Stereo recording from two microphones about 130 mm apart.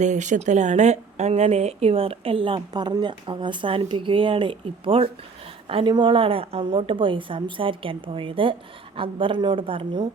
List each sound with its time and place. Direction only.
0.0 s a woman's voice: 65° right (ahead or behind); by 10.1 s 40° right (ahead or behind)